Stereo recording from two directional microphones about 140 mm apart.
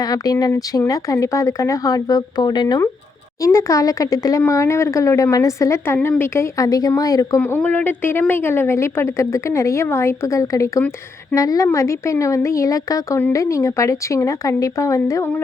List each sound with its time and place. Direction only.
0.0 s speech: 25° left (ahead or behind)
7.4 s a woman's voice: 10° left (ahead or behind)